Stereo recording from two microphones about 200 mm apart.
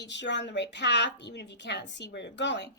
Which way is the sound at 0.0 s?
60° left (ahead or behind).